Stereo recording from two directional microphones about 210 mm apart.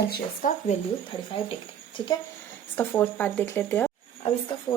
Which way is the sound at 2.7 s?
10° left (ahead or behind).